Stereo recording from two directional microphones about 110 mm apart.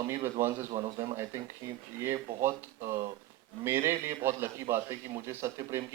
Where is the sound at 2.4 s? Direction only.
25° right (ahead or behind).